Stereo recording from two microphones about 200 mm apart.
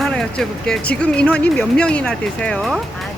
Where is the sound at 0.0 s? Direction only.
5° left (ahead or behind).